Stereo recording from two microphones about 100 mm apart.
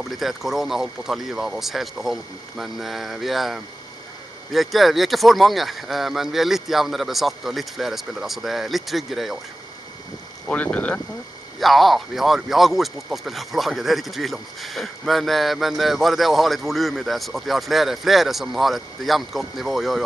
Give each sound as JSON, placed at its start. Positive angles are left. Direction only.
{"t": 0.0, "sound": "speech", "side_deg": 0}
{"t": 10.4, "sound": "speech", "side_deg": 15}
{"t": 11.6, "sound": "speech", "side_deg": 0}